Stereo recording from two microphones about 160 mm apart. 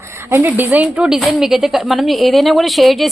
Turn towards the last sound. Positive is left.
turn(degrees=0)  # may be behind; listen again after turning